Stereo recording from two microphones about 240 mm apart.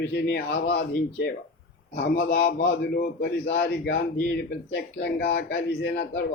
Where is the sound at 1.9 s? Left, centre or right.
Left.